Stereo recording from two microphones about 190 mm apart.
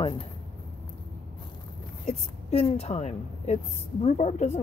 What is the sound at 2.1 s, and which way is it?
Speech, 35° left (ahead or behind).